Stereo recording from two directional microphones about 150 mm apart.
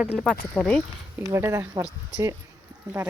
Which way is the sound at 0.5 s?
5° left (ahead or behind).